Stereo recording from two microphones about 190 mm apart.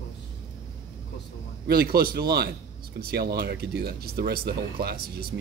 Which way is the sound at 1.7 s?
55° right (ahead or behind).